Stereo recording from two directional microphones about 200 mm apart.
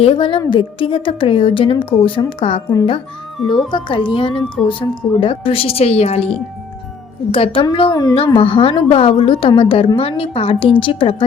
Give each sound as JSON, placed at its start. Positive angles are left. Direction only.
{"t": 0.0, "sound": "a woman's voice", "side_deg": 25}
{"t": 7.3, "sound": "a woman's voice", "side_deg": 25}